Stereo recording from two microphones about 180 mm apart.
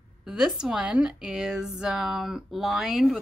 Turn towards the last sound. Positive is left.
turn(degrees=0)  # may be behind; listen again after turning